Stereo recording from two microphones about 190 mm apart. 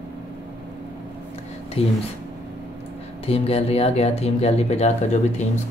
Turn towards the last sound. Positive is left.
turn(degrees=35)  # may be behind; listen again after turning